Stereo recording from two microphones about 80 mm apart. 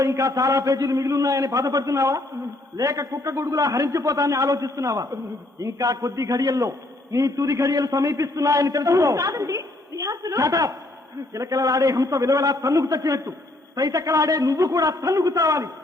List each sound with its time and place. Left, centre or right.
0.0 s a man's voice: right
2.0 s a man's voice: right